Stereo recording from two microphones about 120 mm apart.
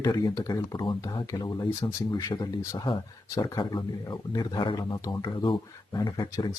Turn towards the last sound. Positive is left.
turn(degrees=40)  # may be behind; listen again after turning